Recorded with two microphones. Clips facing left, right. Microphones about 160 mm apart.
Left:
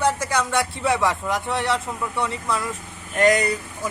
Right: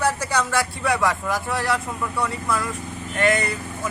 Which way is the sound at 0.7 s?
25° left (ahead or behind).